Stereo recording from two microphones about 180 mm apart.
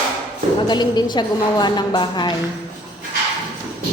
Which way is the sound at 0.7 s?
25° left (ahead or behind).